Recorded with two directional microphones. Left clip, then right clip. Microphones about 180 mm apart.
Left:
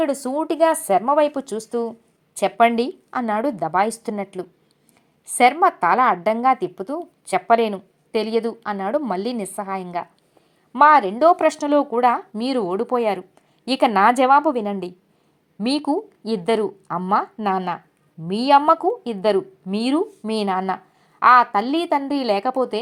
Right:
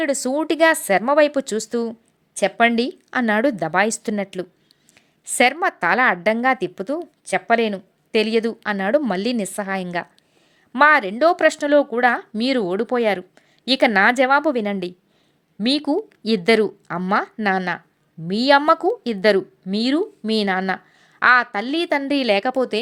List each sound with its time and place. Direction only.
0.0 s a woman's voice: 25° right (ahead or behind)
10.7 s a woman's voice: 20° right (ahead or behind)